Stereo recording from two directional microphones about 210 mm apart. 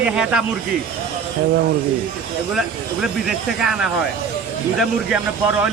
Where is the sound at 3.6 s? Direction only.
Centre (ahead or behind).